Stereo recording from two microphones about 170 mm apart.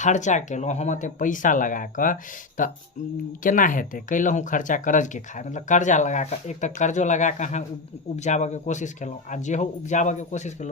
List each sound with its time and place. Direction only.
0.0 s speech: 45° left (ahead or behind)